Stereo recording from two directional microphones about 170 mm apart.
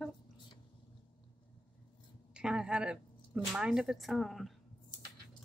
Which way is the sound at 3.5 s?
5° right (ahead or behind).